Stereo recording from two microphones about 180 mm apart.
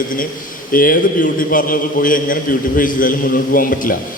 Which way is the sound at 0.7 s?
50° left (ahead or behind).